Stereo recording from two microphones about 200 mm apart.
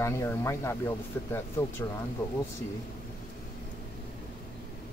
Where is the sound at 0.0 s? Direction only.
15° left (ahead or behind).